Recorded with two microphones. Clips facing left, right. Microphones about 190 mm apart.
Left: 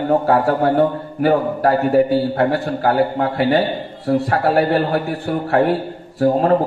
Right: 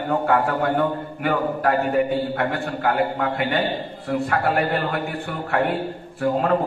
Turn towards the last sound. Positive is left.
turn(degrees=35)  # may be behind; listen again after turning